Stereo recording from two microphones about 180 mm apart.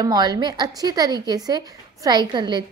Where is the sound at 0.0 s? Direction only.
20° right (ahead or behind).